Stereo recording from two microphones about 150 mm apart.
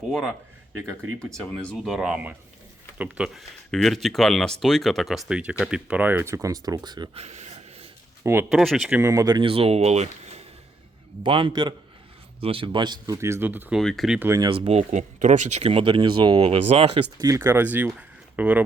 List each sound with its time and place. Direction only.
1.6 s speech: centre (ahead or behind); by 7.2 s 30° right (ahead or behind)
7.2 s a sound: 50° right (ahead or behind)
8.2 s speech: 15° right (ahead or behind)
8.4 s speech: 5° right (ahead or behind)
9.0 s speech: 20° right (ahead or behind); by 10.4 s 45° right (ahead or behind)
11.2 s speech: 35° right (ahead or behind)
13.1 s speech: 20° right (ahead or behind)
13.7 s speech: centre (ahead or behind)
14.2 s speech: 15° right (ahead or behind)
14.4 s speech: 35° right (ahead or behind)
17.2 s speech: 20° right (ahead or behind)